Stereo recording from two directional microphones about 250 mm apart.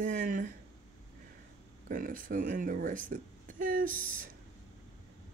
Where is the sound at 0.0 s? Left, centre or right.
Right.